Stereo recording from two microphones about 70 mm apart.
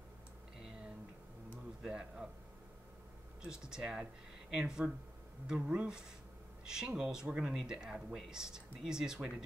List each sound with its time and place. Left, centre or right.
1.8 s speech: centre
3.4 s speech: centre